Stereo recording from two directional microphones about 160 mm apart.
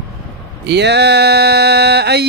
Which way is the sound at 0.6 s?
90° right.